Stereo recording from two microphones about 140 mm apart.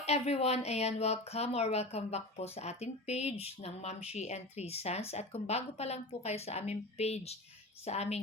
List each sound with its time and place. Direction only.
0.0 s speech: 50° left (ahead or behind)